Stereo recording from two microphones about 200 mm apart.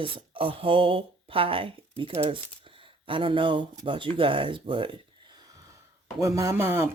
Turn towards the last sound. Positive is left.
turn(degrees=-10)  # may be behind; listen again after turning